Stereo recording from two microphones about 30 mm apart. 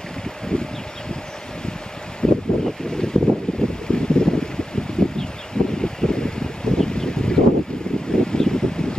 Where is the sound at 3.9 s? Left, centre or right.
Left.